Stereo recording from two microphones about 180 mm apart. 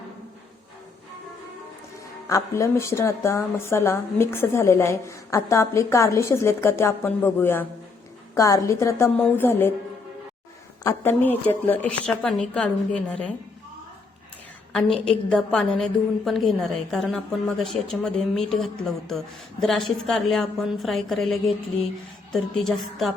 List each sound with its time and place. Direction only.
2.3 s a woman's voice: 15° left (ahead or behind)
10.8 s a woman's voice: 10° left (ahead or behind)
14.7 s a woman's voice: 5° left (ahead or behind)